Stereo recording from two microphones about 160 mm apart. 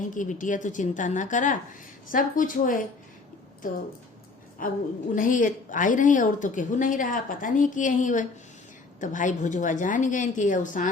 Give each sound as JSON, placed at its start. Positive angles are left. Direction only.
{"t": 0.1, "sound": "a woman's voice", "side_deg": 55}
{"t": 4.6, "sound": "a woman's voice", "side_deg": 55}